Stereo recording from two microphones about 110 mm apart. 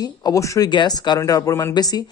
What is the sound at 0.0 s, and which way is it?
Speech, 35° left (ahead or behind).